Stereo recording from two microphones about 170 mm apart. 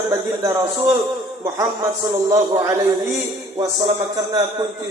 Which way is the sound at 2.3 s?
15° right (ahead or behind).